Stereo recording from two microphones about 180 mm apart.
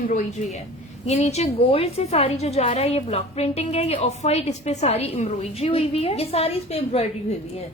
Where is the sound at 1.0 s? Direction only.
40° left (ahead or behind).